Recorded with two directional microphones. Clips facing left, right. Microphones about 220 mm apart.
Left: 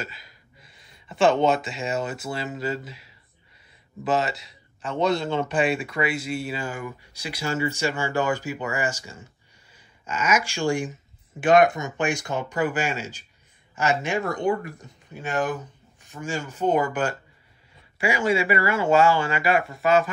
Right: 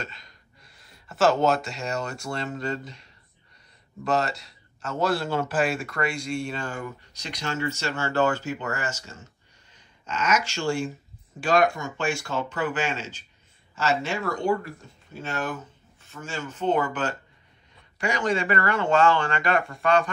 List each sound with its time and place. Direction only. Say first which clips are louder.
0.0 s a man's voice: left 1 dB; 5° left (ahead or behind)